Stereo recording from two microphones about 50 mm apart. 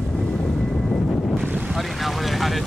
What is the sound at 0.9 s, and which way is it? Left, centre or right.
Boat, centre.